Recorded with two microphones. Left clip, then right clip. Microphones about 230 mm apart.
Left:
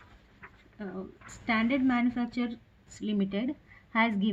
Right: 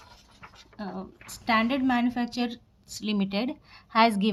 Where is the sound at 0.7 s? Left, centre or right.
Right.